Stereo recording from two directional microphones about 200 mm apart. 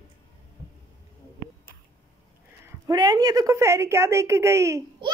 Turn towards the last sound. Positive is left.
turn(degrees=-15)  # may be behind; listen again after turning